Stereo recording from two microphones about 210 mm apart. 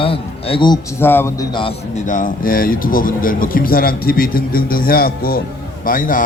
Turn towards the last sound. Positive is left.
turn(degrees=40)  # may be behind; listen again after turning